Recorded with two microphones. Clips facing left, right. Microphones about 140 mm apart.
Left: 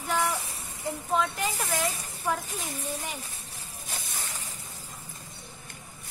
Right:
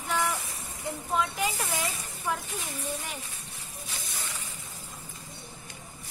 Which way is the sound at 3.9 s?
45° left (ahead or behind).